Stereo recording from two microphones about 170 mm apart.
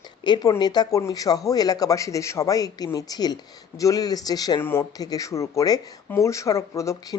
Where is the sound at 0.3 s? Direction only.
25° left (ahead or behind).